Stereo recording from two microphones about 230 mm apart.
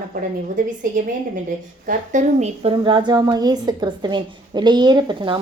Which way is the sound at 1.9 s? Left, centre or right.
Right.